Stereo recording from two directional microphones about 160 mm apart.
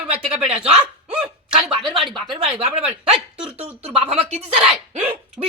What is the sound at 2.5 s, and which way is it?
Speech, 5° right (ahead or behind).